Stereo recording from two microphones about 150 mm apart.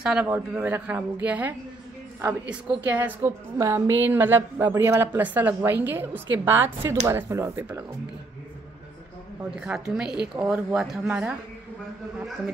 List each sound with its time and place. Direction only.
0.0 s a woman's voice: 10° right (ahead or behind)
2.9 s a woman's voice: 10° right (ahead or behind)
9.6 s speech: 5° right (ahead or behind)